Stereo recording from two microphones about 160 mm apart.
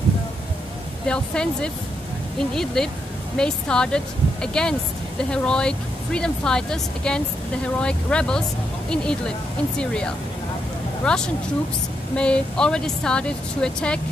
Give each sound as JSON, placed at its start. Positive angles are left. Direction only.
{"t": 1.0, "sound": "speech", "side_deg": 5}
{"t": 11.1, "sound": "speech", "side_deg": 5}